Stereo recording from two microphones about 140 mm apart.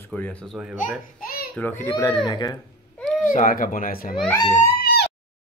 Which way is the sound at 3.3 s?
80° left.